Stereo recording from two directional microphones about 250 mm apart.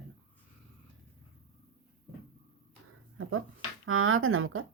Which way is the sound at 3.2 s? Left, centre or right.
Right.